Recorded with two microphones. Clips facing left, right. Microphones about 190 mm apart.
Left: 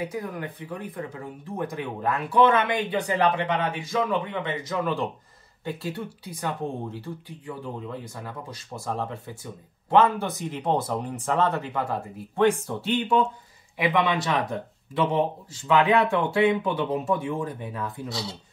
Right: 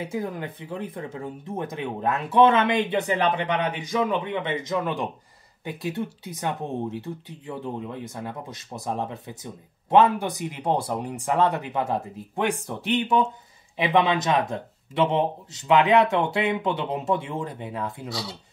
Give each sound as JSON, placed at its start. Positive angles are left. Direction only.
{"t": 0.0, "sound": "speech", "side_deg": -25}